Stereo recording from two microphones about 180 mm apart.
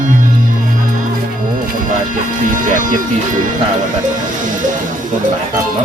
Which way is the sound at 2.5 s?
45° right (ahead or behind).